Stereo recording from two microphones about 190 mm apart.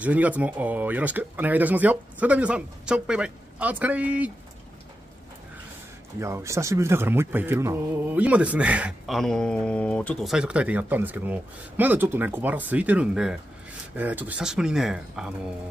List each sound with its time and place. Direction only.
0.0 s speech: 10° right (ahead or behind)
6.1 s speech: 15° right (ahead or behind)